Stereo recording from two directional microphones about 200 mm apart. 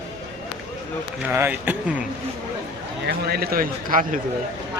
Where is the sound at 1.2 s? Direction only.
10° right (ahead or behind).